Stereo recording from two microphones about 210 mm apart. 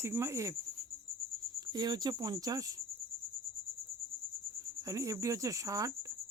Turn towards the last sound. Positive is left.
turn(degrees=-15)  # may be behind; listen again after turning